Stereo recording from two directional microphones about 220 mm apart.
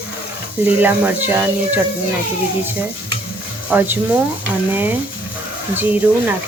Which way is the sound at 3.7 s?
10° right (ahead or behind).